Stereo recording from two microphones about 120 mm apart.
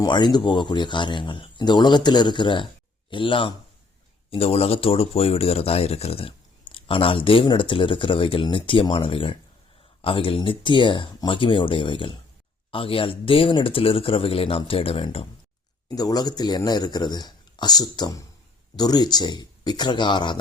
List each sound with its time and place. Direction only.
0.0 s speech: 40° left (ahead or behind)
4.3 s speech: 55° left (ahead or behind)
16.0 s speech: 30° left (ahead or behind)